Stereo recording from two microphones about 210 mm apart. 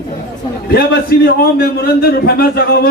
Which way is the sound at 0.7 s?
45° left (ahead or behind).